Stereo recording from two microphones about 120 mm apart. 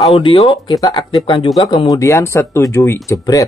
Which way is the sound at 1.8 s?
25° left (ahead or behind).